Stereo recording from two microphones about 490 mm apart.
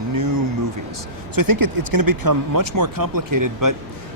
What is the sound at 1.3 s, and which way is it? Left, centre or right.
Speech, right.